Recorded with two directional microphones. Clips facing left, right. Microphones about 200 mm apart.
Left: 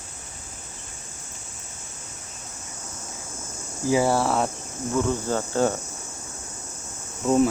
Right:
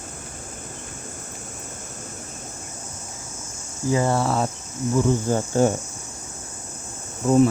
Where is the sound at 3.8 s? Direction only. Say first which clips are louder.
Even; 5° left (ahead or behind).